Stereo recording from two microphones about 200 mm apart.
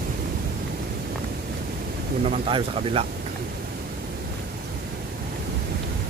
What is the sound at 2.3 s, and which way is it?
Speech, 30° right (ahead or behind).